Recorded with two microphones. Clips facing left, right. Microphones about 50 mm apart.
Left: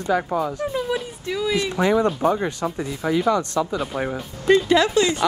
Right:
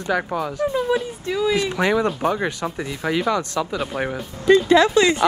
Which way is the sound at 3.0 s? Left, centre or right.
Right.